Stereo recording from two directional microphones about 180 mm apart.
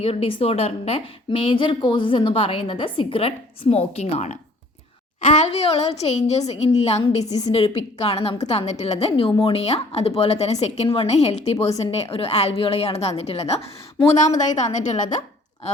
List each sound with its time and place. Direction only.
0.0 s a woman's voice: 30° left (ahead or behind)